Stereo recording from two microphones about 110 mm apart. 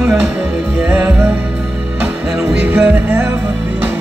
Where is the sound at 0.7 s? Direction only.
15° right (ahead or behind).